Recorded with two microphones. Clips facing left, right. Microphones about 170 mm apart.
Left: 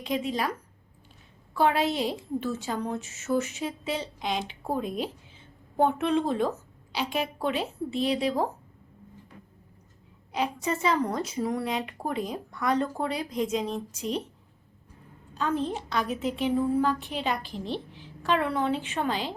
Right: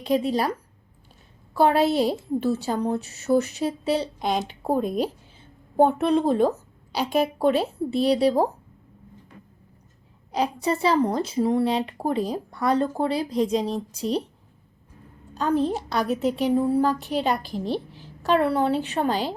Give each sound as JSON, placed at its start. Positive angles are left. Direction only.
{"t": 0.0, "sound": "a woman's voice", "side_deg": -35}
{"t": 1.5, "sound": "a woman's voice", "side_deg": -40}
{"t": 10.3, "sound": "a woman's voice", "side_deg": -35}
{"t": 15.4, "sound": "a woman's voice", "side_deg": -40}